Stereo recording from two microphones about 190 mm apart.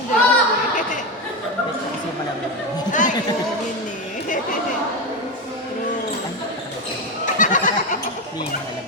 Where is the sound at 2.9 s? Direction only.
40° left (ahead or behind).